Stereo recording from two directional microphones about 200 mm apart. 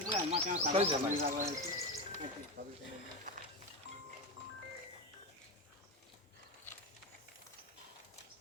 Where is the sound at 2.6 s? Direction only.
45° right (ahead or behind).